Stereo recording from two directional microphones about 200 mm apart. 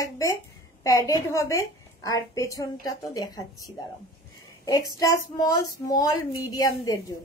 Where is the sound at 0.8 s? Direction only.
15° left (ahead or behind).